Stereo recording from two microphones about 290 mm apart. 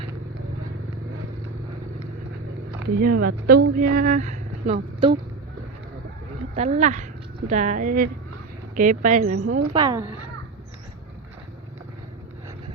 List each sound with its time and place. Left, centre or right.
2.8 s speech: right
6.5 s speech: right
9.7 s speech: centre